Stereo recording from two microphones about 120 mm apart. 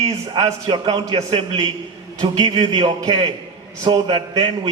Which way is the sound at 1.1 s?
55° right (ahead or behind).